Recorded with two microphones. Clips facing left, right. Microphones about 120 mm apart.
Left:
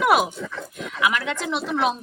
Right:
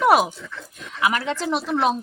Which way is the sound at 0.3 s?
60° left (ahead or behind).